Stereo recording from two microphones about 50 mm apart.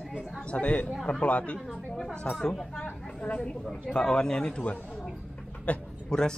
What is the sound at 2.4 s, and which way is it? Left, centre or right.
Speech, centre.